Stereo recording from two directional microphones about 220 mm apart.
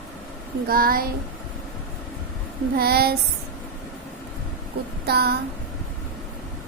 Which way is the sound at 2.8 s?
45° right (ahead or behind).